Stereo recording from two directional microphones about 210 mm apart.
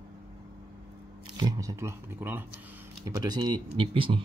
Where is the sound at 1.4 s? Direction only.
15° right (ahead or behind).